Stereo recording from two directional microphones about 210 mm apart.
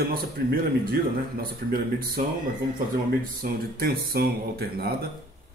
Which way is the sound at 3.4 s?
45° right (ahead or behind).